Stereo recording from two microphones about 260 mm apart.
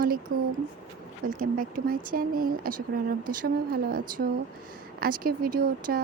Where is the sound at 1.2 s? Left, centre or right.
Right.